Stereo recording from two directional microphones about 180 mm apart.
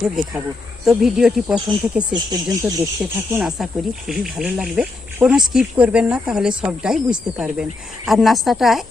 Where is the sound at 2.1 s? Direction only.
20° right (ahead or behind).